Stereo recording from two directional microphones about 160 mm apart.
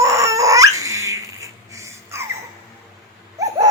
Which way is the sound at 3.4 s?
20° right (ahead or behind).